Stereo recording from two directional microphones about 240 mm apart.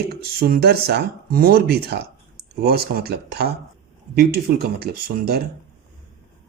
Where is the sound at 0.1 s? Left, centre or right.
Right.